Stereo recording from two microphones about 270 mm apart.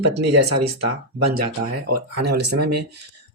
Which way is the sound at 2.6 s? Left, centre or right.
Right.